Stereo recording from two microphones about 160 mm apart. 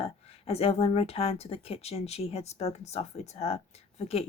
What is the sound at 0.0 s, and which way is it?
A woman's voice, 40° left (ahead or behind).